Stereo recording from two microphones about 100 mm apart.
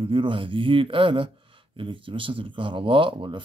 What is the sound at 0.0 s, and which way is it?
Speech, 60° right (ahead or behind).